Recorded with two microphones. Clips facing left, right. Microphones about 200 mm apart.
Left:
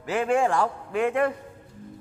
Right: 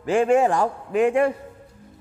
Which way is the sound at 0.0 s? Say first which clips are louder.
Right 5 dB; 30° right (ahead or behind).